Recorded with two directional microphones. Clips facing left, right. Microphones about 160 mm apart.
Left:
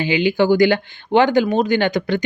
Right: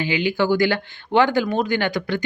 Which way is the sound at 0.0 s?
20° left (ahead or behind).